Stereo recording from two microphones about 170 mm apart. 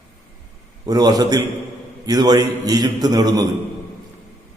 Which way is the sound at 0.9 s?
20° right (ahead or behind).